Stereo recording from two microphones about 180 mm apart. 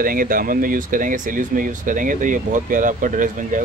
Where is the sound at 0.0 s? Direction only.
50° right (ahead or behind).